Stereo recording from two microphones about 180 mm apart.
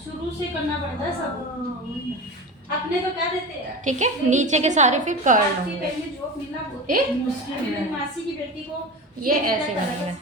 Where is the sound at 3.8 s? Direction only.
40° right (ahead or behind).